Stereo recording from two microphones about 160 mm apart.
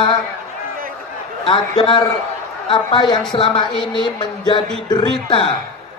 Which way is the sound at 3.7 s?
Centre (ahead or behind).